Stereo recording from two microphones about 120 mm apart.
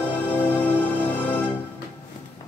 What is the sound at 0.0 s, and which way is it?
Music, 15° left (ahead or behind).